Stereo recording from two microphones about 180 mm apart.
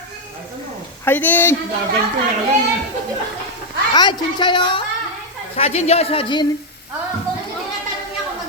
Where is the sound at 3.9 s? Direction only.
25° left (ahead or behind).